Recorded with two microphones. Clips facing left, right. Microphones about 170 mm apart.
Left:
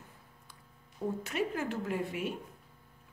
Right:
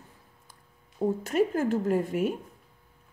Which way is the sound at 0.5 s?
45° right (ahead or behind).